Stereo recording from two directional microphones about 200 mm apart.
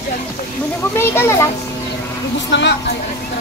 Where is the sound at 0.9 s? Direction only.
10° left (ahead or behind).